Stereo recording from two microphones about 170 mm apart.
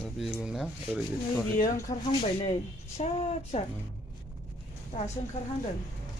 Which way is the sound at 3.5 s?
40° left (ahead or behind).